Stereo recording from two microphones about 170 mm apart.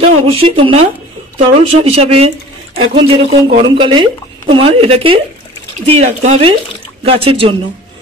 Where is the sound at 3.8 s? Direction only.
30° right (ahead or behind).